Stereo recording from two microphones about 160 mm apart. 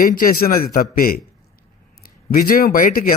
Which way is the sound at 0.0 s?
60° left (ahead or behind).